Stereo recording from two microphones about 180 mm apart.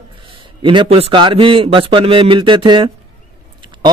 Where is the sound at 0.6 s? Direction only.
25° right (ahead or behind).